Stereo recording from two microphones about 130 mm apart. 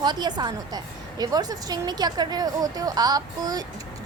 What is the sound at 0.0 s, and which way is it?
A woman's voice, 35° right (ahead or behind).